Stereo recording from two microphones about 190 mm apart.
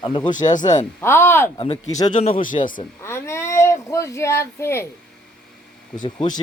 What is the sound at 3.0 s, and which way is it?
Speech, 15° left (ahead or behind).